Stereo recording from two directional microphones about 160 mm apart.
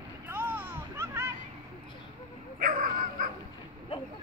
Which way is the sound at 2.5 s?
60° right (ahead or behind).